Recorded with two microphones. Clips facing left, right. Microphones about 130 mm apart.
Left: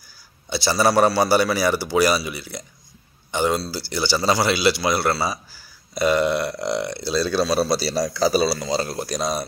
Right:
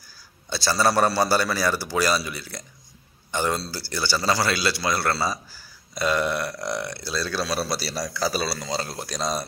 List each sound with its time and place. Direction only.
0.5 s a man's voice: 15° left (ahead or behind); by 8.3 s 30° left (ahead or behind)
8.3 s a man's voice: 15° left (ahead or behind)